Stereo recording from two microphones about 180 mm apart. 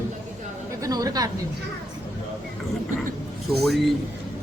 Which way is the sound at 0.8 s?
20° right (ahead or behind).